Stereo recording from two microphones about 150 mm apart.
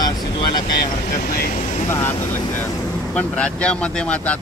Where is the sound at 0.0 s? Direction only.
25° left (ahead or behind).